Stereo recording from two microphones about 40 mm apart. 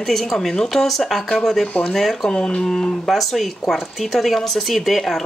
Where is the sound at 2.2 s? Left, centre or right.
Left.